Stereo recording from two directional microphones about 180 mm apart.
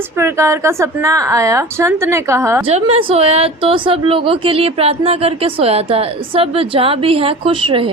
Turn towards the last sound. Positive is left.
turn(degrees=-30)  # may be behind; listen again after turning